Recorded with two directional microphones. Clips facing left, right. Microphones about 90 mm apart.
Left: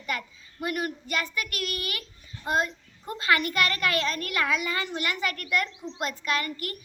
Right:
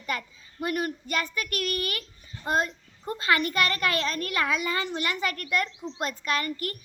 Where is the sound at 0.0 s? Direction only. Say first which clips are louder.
Even; 35° right (ahead or behind).